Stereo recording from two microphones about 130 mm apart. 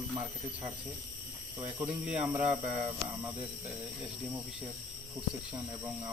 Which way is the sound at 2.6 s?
65° right (ahead or behind).